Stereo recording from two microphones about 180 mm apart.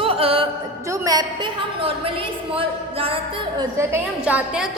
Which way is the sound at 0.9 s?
20° right (ahead or behind).